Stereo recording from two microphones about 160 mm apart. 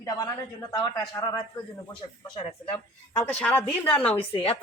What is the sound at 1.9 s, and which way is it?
Speech, 35° left (ahead or behind).